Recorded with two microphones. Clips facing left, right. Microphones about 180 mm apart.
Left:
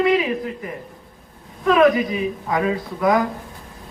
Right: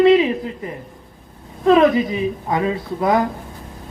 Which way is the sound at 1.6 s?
30° right (ahead or behind).